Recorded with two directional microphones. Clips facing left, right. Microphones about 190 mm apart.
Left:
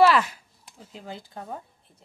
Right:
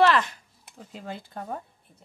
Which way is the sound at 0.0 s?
10° left (ahead or behind).